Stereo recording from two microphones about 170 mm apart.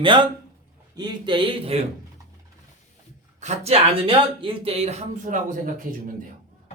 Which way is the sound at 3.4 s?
40° right (ahead or behind).